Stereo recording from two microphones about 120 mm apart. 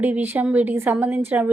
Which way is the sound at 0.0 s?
15° right (ahead or behind).